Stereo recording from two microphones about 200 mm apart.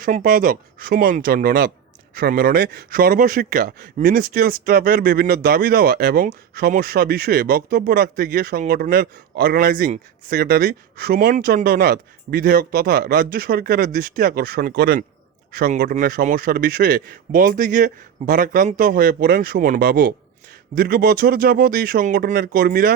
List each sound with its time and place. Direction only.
0.0 s speech: 40° right (ahead or behind)